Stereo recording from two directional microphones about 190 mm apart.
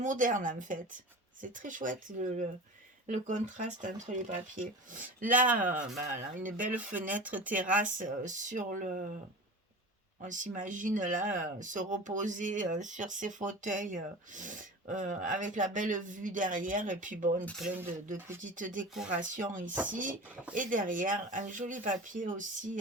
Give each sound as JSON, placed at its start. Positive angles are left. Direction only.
{"t": 0.0, "sound": "speech", "side_deg": -45}
{"t": 6.7, "sound": "speech", "side_deg": -10}
{"t": 7.9, "sound": "speech", "side_deg": -40}
{"t": 10.2, "sound": "speech", "side_deg": -40}
{"t": 18.4, "sound": "speech", "side_deg": -45}